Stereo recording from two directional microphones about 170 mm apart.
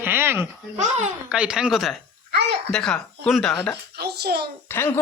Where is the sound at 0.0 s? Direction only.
10° right (ahead or behind).